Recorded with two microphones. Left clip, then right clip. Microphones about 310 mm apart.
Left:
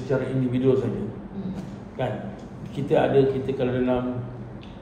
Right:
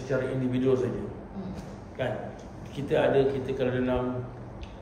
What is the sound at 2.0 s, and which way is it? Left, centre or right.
A man's voice, centre.